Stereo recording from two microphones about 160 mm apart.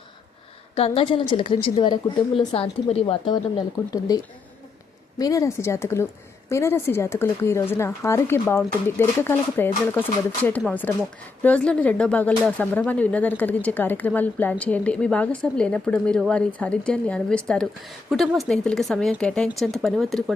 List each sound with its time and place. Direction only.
0.8 s speech: 35° left (ahead or behind); by 20.3 s centre (ahead or behind)